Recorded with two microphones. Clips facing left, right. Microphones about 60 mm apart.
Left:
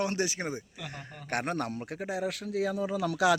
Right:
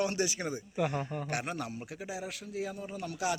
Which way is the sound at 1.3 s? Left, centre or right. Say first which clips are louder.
Left 9 dB; left.